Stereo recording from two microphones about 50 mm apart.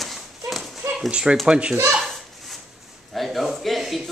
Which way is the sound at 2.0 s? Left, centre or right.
Centre.